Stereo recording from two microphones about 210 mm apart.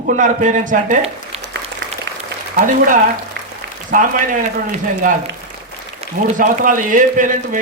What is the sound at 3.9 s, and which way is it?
Speech, 40° right (ahead or behind).